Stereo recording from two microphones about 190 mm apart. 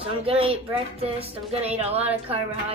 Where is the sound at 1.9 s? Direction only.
10° right (ahead or behind).